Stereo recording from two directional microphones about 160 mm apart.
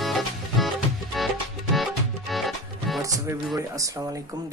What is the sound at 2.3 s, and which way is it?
Music, centre (ahead or behind).